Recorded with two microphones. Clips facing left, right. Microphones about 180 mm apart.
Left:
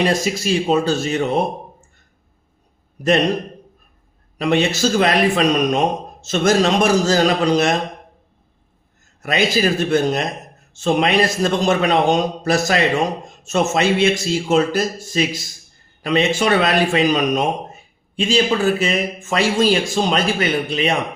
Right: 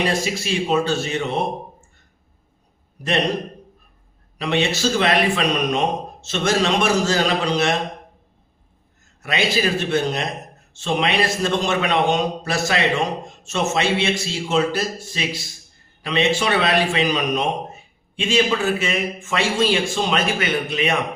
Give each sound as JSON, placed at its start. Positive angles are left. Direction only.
{"t": 0.1, "sound": "a man's voice", "side_deg": 40}
{"t": 4.4, "sound": "a man's voice", "side_deg": 45}
{"t": 9.2, "sound": "a man's voice", "side_deg": 40}